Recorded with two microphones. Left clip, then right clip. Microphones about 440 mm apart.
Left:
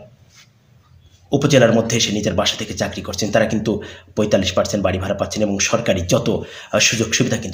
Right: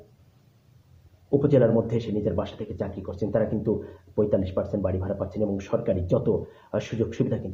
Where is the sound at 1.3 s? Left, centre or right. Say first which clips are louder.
Left 7 dB; right.